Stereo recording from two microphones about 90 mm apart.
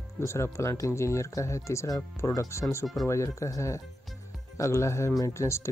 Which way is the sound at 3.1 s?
35° left (ahead or behind).